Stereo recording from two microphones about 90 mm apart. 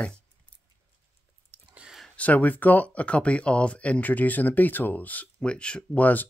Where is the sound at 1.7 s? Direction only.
10° right (ahead or behind).